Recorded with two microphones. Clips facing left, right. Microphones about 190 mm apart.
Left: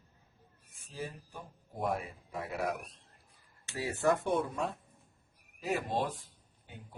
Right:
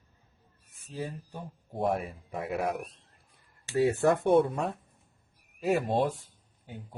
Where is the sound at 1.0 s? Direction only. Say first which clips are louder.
Right 4 dB; 25° right (ahead or behind).